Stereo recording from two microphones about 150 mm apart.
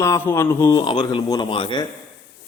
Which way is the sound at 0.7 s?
30° left (ahead or behind).